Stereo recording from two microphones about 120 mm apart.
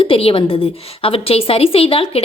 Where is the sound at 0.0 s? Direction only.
50° left (ahead or behind).